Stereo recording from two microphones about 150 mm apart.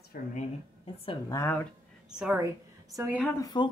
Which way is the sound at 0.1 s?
75° left (ahead or behind).